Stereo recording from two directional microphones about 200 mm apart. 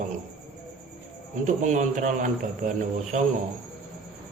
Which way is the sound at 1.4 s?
40° right (ahead or behind).